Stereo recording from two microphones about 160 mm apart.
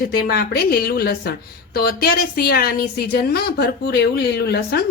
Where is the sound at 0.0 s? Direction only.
70° left (ahead or behind).